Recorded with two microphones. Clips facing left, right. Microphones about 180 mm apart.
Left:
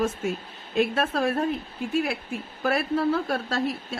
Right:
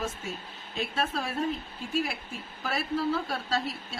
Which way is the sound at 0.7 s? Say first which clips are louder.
Left 8 dB; 55° left (ahead or behind).